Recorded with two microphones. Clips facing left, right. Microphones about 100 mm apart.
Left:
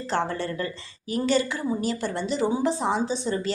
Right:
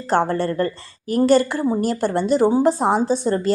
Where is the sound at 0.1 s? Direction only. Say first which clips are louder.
Right 8 dB; 50° right (ahead or behind).